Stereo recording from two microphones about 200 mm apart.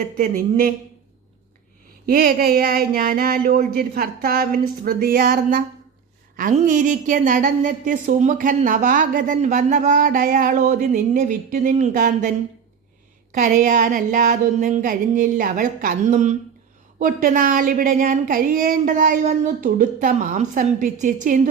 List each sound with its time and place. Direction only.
0.0 s a woman's voice: 45° right (ahead or behind)
2.0 s a woman's voice: 45° right (ahead or behind)
13.3 s a woman's voice: 40° right (ahead or behind)